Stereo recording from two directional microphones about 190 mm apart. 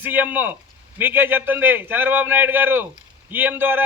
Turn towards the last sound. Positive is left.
turn(degrees=-10)  # may be behind; listen again after turning